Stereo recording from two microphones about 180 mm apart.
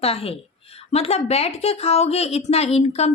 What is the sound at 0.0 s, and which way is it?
A woman's voice, 35° left (ahead or behind).